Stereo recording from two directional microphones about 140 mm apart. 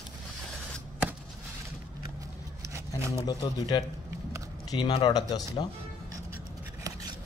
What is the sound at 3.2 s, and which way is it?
Speech, 35° left (ahead or behind).